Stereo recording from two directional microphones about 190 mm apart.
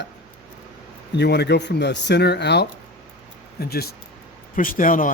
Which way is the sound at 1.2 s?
60° left (ahead or behind).